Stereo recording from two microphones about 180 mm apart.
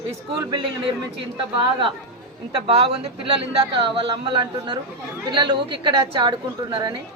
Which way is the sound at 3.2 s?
30° right (ahead or behind).